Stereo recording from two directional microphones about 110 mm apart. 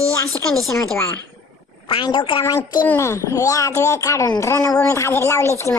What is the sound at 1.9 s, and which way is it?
Speech, 50° left (ahead or behind).